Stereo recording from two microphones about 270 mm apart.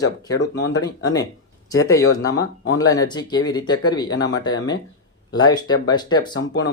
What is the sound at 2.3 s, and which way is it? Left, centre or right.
Speech, left.